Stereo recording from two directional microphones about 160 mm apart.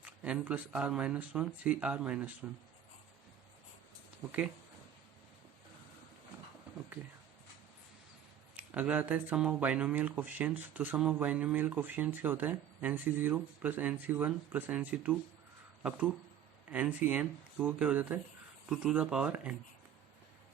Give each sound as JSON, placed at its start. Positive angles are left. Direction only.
{"t": 0.0, "sound": "speech", "side_deg": -10}
{"t": 8.5, "sound": "speech", "side_deg": -10}